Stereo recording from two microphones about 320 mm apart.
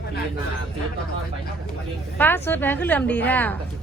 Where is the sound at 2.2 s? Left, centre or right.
Centre.